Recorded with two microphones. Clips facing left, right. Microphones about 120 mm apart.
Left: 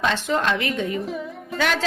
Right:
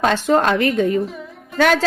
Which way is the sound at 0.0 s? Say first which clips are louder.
Right 6 dB; 45° right (ahead or behind).